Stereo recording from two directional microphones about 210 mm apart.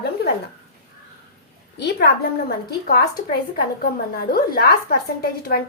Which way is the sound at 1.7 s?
50° left (ahead or behind).